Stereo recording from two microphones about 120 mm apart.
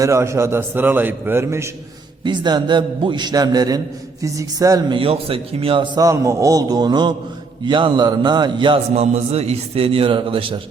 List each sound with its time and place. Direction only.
0.0 s a man's voice: 25° right (ahead or behind)
2.2 s a man's voice: 40° right (ahead or behind)
4.9 s a man's voice: 50° right (ahead or behind)
6.0 s a man's voice: 25° right (ahead or behind)
9.0 s a man's voice: 60° right (ahead or behind)